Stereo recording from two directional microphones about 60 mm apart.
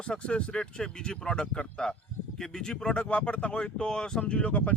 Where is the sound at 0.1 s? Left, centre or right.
Centre.